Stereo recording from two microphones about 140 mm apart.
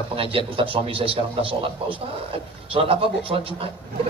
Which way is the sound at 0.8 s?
40° right (ahead or behind).